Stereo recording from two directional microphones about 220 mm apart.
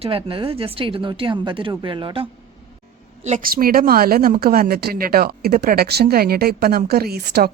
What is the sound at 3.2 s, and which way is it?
A woman's voice, 35° right (ahead or behind).